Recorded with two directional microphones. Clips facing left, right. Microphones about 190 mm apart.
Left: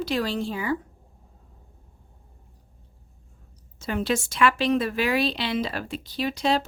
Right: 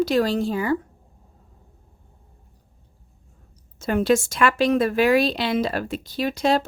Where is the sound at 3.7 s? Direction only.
50° right (ahead or behind).